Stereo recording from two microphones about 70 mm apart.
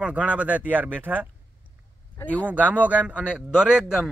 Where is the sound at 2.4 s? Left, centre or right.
Right.